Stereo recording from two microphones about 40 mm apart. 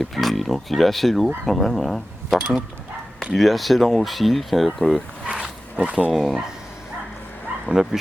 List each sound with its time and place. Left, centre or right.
0.0 s speech: centre
5.4 s zipper: right
6.1 s speech: centre
7.7 s speech: right